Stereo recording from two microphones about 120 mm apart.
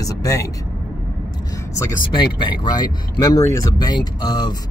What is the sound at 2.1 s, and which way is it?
Speech, 40° left (ahead or behind).